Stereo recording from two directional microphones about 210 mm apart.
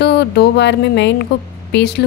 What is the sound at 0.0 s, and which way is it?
A woman's voice, 50° left (ahead or behind).